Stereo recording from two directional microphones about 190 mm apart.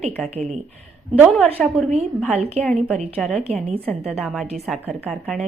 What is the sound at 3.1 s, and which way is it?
Speech, centre (ahead or behind).